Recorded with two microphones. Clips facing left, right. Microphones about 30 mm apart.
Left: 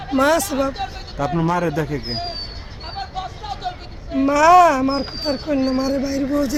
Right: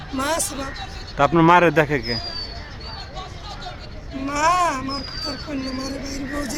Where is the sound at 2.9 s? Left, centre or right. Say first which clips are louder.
Left 11 dB; centre.